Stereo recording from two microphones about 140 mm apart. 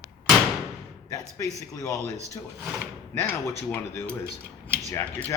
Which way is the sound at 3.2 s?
20° left (ahead or behind).